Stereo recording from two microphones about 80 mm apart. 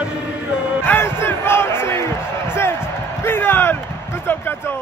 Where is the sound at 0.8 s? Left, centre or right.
Left.